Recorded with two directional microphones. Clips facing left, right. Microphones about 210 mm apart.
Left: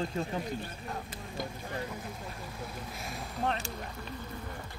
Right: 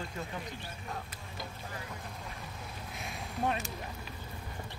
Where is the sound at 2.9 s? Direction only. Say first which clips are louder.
Left 2 dB; centre (ahead or behind).